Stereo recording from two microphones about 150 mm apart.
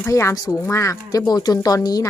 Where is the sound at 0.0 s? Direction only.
20° left (ahead or behind).